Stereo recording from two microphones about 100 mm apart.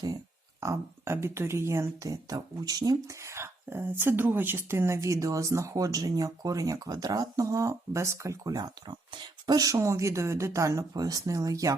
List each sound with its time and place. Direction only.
0.6 s speech: 25° right (ahead or behind)